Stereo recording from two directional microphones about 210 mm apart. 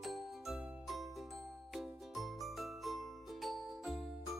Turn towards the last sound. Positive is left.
turn(degrees=0)  # may be behind; listen again after turning